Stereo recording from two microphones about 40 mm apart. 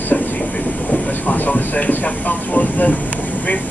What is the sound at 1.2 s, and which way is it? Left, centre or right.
Speech, left.